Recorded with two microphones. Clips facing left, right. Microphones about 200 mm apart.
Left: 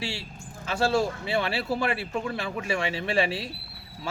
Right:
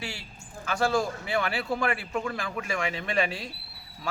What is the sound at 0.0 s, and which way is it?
Speech, 25° left (ahead or behind).